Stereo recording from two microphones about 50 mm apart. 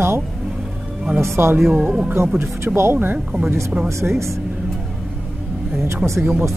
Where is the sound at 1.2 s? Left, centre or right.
Right.